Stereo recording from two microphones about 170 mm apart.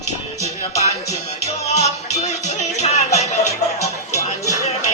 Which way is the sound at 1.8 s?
40° left (ahead or behind).